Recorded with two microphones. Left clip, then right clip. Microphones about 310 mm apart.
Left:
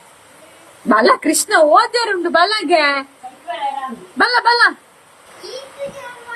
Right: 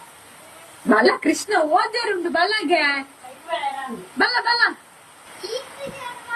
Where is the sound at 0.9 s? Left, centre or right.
Centre.